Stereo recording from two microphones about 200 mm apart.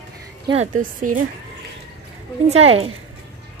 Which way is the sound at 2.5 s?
30° right (ahead or behind).